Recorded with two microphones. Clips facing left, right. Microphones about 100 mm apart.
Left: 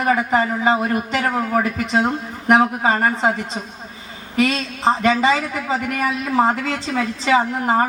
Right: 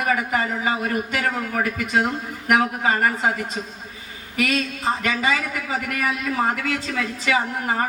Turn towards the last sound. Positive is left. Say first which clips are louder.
# left 6 dB
turn(degrees=30)  # may be behind; listen again after turning